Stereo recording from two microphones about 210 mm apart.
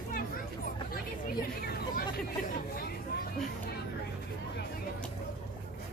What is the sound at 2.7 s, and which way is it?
Vehicle, 45° left (ahead or behind).